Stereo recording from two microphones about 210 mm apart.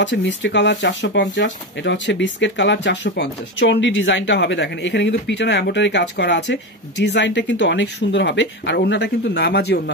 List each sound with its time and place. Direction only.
0.0 s speech: 60° left (ahead or behind)